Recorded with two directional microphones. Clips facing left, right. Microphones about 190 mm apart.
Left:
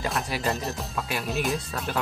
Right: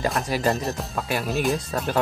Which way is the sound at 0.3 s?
40° right (ahead or behind).